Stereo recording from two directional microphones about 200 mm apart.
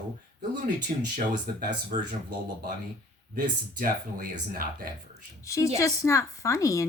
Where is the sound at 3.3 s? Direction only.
45° right (ahead or behind).